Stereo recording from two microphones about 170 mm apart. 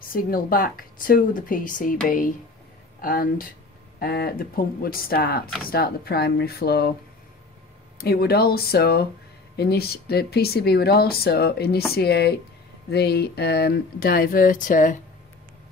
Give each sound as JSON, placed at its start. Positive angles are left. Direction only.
{"t": 0.0, "sound": "speech", "side_deg": 55}
{"t": 8.0, "sound": "speech", "side_deg": 65}